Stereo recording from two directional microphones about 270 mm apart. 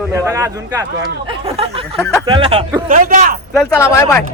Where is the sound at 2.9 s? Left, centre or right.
Right.